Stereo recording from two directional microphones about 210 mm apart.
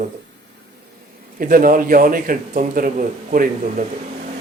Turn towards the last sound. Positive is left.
turn(degrees=-40)  # may be behind; listen again after turning